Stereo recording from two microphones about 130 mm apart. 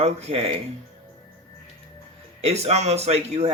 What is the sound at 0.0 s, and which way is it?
Speech, 50° right (ahead or behind).